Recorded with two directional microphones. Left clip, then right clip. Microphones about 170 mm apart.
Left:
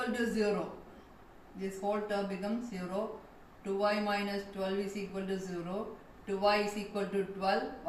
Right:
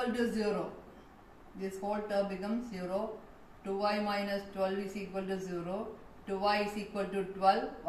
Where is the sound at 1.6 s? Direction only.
15° left (ahead or behind).